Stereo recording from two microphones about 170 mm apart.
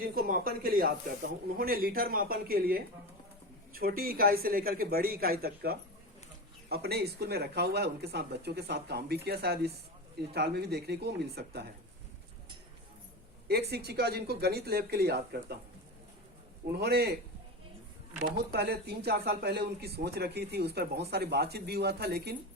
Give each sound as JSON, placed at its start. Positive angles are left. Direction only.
{"t": 0.0, "sound": "speech", "side_deg": -55}
{"t": 13.5, "sound": "speech", "side_deg": -70}
{"t": 16.7, "sound": "speech", "side_deg": -70}
{"t": 18.2, "sound": "speech", "side_deg": -70}